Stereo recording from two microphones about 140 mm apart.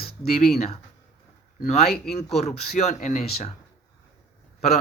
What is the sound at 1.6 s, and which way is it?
Speech, 50° left (ahead or behind).